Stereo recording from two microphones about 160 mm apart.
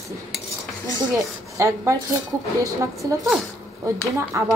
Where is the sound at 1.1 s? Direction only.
20° right (ahead or behind).